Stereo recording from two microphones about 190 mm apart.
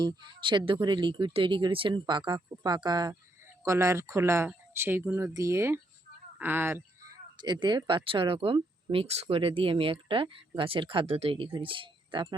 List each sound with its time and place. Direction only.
0.0 s speech: 25° right (ahead or behind)
7.3 s speech: 25° right (ahead or behind)